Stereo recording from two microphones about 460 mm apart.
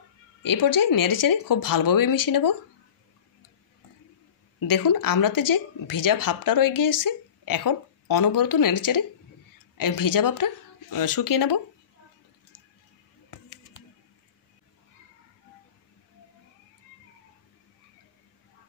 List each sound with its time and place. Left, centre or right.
0.4 s a woman's voice: left
4.6 s speech: left